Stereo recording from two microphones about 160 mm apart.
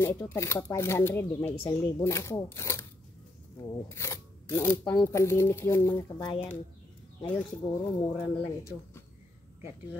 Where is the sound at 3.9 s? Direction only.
15° left (ahead or behind).